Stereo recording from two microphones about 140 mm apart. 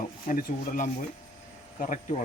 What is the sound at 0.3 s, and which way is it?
Speech, 80° left.